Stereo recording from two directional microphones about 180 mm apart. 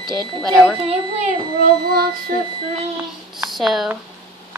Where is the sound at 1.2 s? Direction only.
50° right (ahead or behind).